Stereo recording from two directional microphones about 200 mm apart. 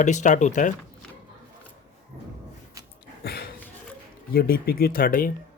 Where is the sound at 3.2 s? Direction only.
50° left (ahead or behind).